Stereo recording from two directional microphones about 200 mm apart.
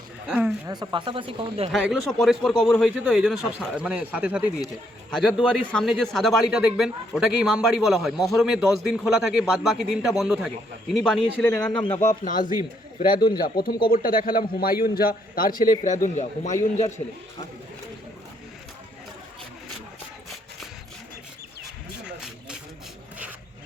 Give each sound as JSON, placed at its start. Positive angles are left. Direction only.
{"t": 0.3, "sound": "a man's voice", "side_deg": -5}
{"t": 0.7, "sound": "speech", "side_deg": -20}
{"t": 1.7, "sound": "a man's voice", "side_deg": 0}
{"t": 11.7, "sound": "speech", "side_deg": 25}
{"t": 12.2, "sound": "a man's voice", "side_deg": 40}
{"t": 13.1, "sound": "speech", "side_deg": 20}
{"t": 13.4, "sound": "a man's voice", "side_deg": 50}
{"t": 22.0, "sound": "a sound", "side_deg": -5}